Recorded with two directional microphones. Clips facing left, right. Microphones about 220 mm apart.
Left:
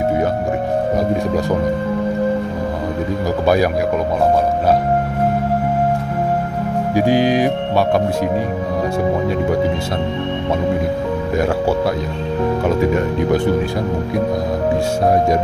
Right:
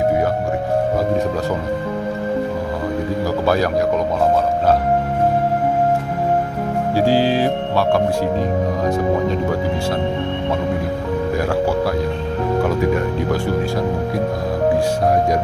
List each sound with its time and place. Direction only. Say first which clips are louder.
7.0 s speech: left 2 dB; 15° left (ahead or behind)